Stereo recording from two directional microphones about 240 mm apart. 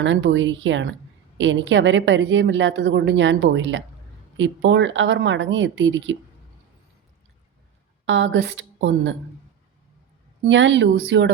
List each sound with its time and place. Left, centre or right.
0.0 s a woman's voice: right
8.0 s a woman's voice: right
10.4 s a woman's voice: right